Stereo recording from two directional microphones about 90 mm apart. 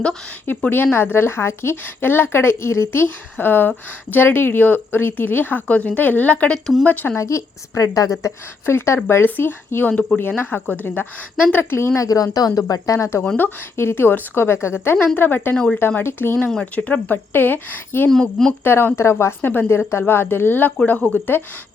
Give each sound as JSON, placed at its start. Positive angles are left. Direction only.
{"t": 0.4, "sound": "a woman's voice", "side_deg": 20}
{"t": 7.2, "sound": "a woman's voice", "side_deg": 35}
{"t": 11.9, "sound": "a woman's voice", "side_deg": 40}
{"t": 13.2, "sound": "a woman's voice", "side_deg": 20}
{"t": 15.5, "sound": "speech", "side_deg": 10}
{"t": 15.8, "sound": "a woman's voice", "side_deg": 25}
{"t": 16.5, "sound": "a woman's voice", "side_deg": 10}
{"t": 18.1, "sound": "speech", "side_deg": 5}
{"t": 18.6, "sound": "a woman's voice", "side_deg": 25}